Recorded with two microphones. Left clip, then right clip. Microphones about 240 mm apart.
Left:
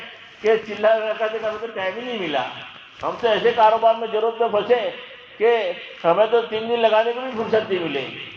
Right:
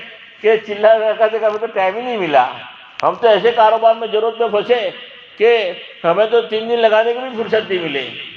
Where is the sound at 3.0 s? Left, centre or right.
Right.